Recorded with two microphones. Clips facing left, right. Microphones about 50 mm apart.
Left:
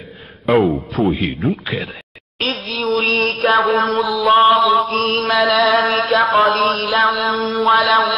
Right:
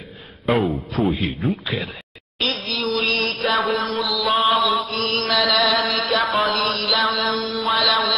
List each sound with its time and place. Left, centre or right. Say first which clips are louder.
0.7 s a man's voice: left 4 dB; centre
2.4 s music: left 3 dB; left
7.1 s mantra: left 4 dB; centre
7.3 s music: left 7 dB; left